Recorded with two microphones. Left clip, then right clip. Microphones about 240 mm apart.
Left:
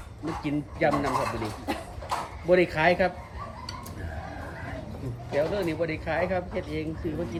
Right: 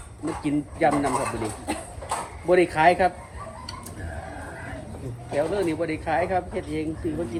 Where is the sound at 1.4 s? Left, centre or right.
Right.